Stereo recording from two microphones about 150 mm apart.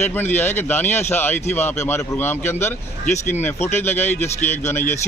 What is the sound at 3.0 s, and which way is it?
Speech, 50° left (ahead or behind).